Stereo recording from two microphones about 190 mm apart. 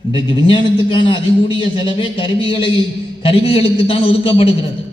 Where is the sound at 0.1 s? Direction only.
25° left (ahead or behind).